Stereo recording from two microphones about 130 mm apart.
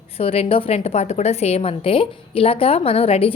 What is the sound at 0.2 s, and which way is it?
A woman's voice, 45° left (ahead or behind).